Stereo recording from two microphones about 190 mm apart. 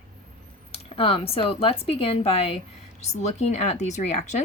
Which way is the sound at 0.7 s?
30° left (ahead or behind).